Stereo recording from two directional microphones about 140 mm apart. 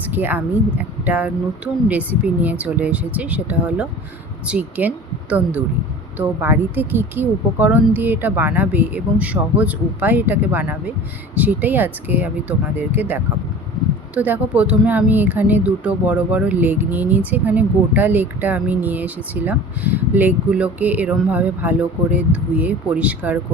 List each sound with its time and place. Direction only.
0.1 s a woman's voice: 15° right (ahead or behind)